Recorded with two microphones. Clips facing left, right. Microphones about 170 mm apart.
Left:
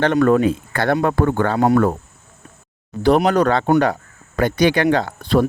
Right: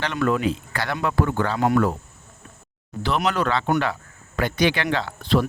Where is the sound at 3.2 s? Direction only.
45° left (ahead or behind).